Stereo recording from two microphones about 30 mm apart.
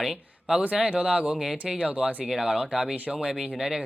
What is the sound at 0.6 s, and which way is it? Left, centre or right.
Speech, right.